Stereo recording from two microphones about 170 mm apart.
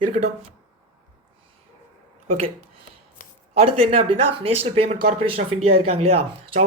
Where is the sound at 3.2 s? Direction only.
55° left (ahead or behind).